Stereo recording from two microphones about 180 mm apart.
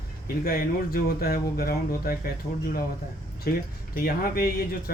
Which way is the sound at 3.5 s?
60° left (ahead or behind).